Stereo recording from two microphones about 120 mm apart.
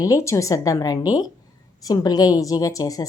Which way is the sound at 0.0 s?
25° left (ahead or behind).